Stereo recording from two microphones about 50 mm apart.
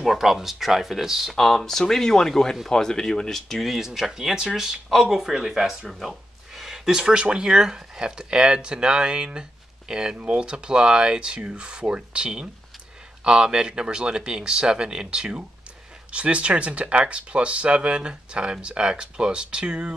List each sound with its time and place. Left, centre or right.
0.0 s speech: centre
1.3 s speech: centre; by 19.9 s right